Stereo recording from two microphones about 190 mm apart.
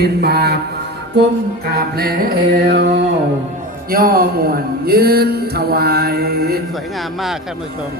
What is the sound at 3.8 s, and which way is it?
Speech, 50° right (ahead or behind).